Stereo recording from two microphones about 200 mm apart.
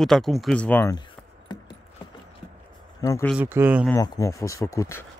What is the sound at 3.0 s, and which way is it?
Speech, 15° left (ahead or behind).